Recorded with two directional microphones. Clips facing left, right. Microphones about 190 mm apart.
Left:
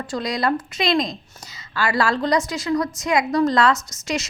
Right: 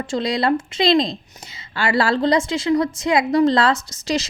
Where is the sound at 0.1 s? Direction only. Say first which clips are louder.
Right 3 dB; 25° right (ahead or behind).